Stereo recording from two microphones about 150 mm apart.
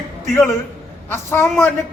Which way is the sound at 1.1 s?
15° left (ahead or behind).